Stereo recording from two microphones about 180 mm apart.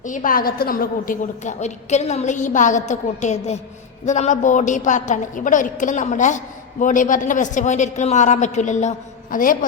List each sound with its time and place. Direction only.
0.0 s a woman's voice: 45° left (ahead or behind)